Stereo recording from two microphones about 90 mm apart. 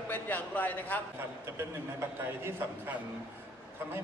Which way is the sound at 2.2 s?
25° right (ahead or behind).